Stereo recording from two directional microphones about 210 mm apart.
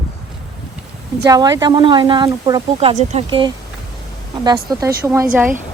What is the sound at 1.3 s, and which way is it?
Speech, 15° right (ahead or behind).